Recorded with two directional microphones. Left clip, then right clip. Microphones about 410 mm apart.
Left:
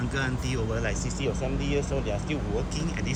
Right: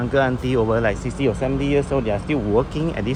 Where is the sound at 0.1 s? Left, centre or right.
Centre.